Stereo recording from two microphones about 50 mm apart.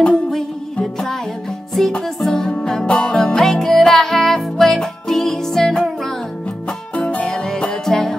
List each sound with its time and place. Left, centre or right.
1.8 s music: centre
7.0 s music: left
7.2 s music: centre